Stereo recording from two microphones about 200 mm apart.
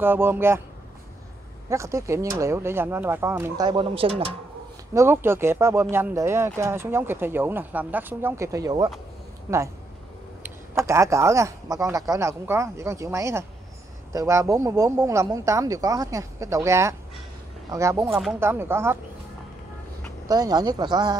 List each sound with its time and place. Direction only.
0.0 s speech: 10° right (ahead or behind)
1.7 s speech: 15° right (ahead or behind)
4.9 s speech: 10° right (ahead or behind)
10.7 s speech: 15° right (ahead or behind)
20.2 s speech: 20° right (ahead or behind)